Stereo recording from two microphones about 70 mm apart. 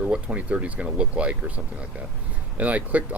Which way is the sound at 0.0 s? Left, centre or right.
Centre.